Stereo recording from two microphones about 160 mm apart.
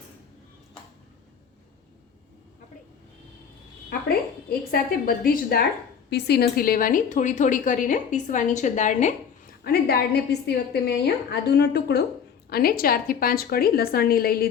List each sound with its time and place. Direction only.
3.8 s a woman's voice: 70° left (ahead or behind)
6.1 s a woman's voice: 90° left; by 9.1 s 50° left (ahead or behind)
9.6 s a woman's voice: 75° left (ahead or behind)
12.5 s a woman's voice: 70° left (ahead or behind)